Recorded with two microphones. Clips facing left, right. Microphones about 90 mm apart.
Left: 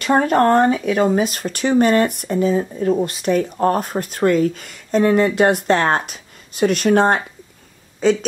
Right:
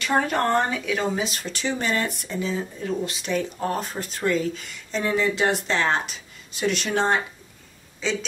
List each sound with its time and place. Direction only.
0.0 s speech: 40° left (ahead or behind)